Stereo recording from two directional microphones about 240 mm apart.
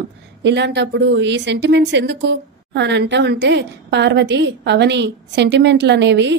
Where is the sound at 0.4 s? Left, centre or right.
Right.